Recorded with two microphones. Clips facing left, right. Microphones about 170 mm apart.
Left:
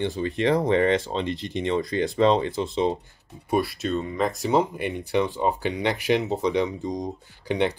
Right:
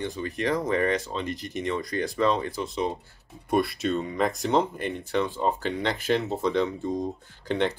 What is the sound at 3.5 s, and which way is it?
Speech, centre (ahead or behind).